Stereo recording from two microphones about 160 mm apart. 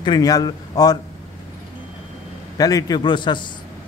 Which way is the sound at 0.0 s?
25° left (ahead or behind).